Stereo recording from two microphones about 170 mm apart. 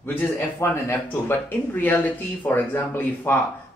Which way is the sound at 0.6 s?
15° left (ahead or behind).